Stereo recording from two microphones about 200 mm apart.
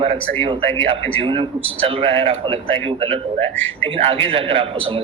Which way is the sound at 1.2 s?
25° right (ahead or behind).